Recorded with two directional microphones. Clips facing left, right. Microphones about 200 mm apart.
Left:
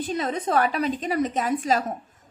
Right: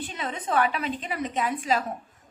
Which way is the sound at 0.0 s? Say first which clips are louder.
Left 7 dB; 40° left (ahead or behind).